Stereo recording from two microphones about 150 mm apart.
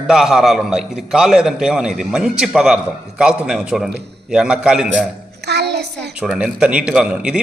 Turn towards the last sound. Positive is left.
turn(degrees=-5)  # may be behind; listen again after turning